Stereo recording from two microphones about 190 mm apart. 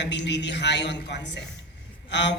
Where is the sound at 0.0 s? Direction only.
65° left (ahead or behind).